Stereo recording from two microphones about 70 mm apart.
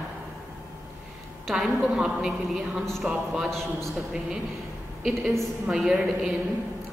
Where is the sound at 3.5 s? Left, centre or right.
Centre.